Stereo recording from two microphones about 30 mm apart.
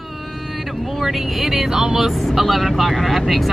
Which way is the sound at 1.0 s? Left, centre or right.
Centre.